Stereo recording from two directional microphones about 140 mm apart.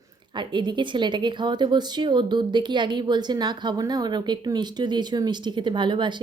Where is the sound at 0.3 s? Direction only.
35° right (ahead or behind).